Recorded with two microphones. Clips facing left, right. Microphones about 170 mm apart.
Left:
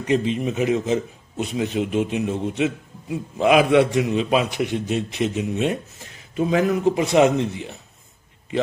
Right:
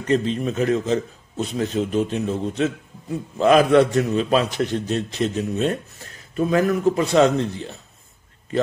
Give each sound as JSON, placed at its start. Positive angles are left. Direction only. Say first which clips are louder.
{"t": 0.0, "sound": "a man's voice", "louder": "even", "side_deg": 10}